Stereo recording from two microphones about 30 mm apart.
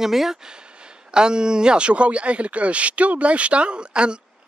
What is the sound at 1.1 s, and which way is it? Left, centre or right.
A man's voice, right.